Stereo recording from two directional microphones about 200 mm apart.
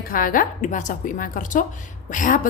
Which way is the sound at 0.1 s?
45° left (ahead or behind).